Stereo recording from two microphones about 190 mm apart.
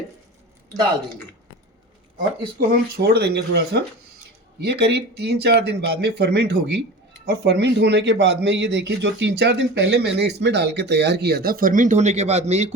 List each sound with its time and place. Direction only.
2.6 s a man's voice: 60° right (ahead or behind); by 12.7 s 35° right (ahead or behind)